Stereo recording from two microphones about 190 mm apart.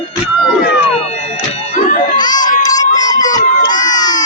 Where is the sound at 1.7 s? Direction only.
45° left (ahead or behind).